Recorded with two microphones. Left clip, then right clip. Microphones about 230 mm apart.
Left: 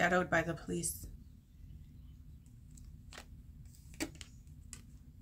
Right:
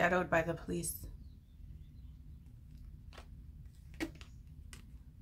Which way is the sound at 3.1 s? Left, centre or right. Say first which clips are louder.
Left 4 dB; left.